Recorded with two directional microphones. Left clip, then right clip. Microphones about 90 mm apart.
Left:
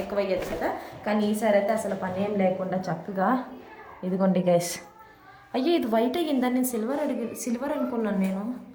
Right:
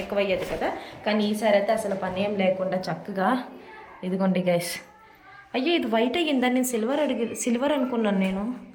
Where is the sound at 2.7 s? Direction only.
10° left (ahead or behind).